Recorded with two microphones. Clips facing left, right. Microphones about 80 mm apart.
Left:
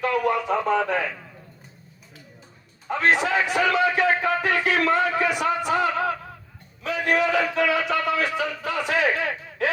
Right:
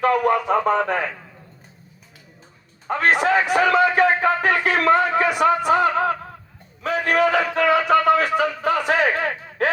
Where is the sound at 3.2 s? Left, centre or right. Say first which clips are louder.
Right 4 dB; right.